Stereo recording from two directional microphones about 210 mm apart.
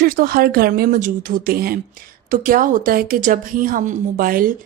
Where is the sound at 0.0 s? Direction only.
45° right (ahead or behind).